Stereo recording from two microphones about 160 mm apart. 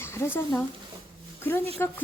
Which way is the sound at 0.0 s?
15° left (ahead or behind).